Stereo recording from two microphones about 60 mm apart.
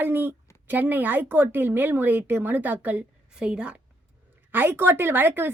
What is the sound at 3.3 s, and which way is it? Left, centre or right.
Speech, centre.